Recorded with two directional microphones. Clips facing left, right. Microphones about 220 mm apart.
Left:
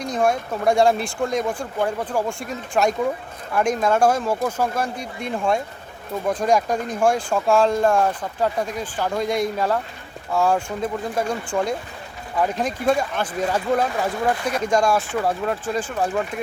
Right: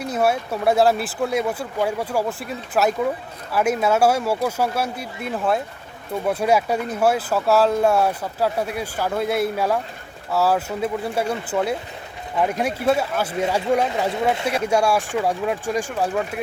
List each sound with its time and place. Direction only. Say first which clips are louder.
0.0 s speech: even; 5° right (ahead or behind); by 14.4 s 25° right (ahead or behind)
14.6 s speech: left 1 dB; 10° right (ahead or behind)